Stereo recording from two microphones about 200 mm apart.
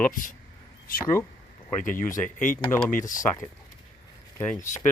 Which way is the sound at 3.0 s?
40° left (ahead or behind).